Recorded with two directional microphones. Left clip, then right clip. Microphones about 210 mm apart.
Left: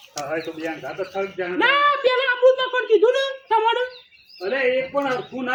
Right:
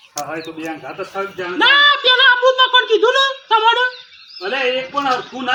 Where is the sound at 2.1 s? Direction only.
10° right (ahead or behind).